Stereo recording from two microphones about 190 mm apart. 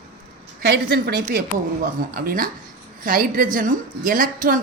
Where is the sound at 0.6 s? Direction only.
60° right (ahead or behind).